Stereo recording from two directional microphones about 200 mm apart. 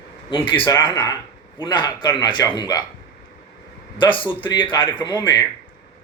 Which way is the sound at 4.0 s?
25° left (ahead or behind).